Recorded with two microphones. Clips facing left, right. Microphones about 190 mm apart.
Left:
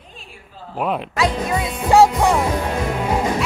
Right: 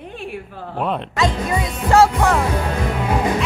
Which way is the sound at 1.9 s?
15° left (ahead or behind).